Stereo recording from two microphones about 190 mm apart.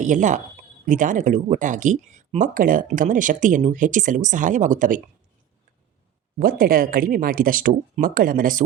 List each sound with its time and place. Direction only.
0.0 s speech: 40° right (ahead or behind)
6.4 s speech: 50° right (ahead or behind)